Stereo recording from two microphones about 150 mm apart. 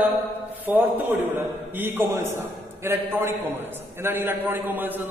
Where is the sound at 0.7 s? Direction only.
10° right (ahead or behind).